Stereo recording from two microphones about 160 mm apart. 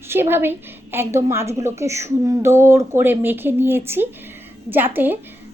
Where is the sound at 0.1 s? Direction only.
15° right (ahead or behind).